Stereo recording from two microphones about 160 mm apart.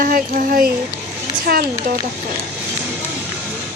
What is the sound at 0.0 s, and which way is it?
Speech, 60° right (ahead or behind).